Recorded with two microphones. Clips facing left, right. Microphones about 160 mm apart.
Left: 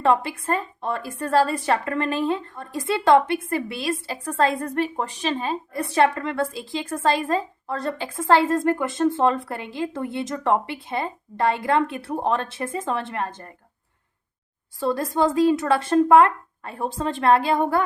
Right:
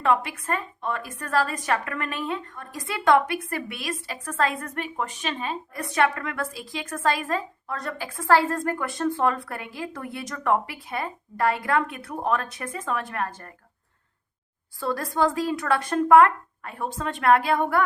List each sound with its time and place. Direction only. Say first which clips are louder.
0.0 s a woman's voice: left 3 dB; 35° left (ahead or behind)
14.8 s a woman's voice: left 3 dB; 20° left (ahead or behind)